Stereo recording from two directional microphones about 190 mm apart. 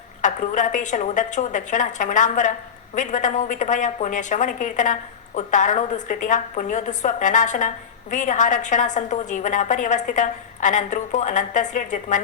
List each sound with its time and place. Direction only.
0.2 s a woman's voice: 40° left (ahead or behind)